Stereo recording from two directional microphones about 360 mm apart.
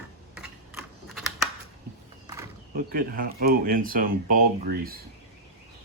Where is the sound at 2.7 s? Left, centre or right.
Right.